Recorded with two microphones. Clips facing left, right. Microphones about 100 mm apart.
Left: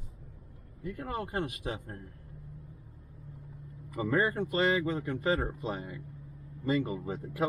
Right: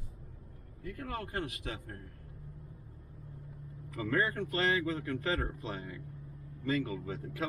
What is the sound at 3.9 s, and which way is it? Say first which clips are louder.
Speech: left 3 dB; 20° left (ahead or behind).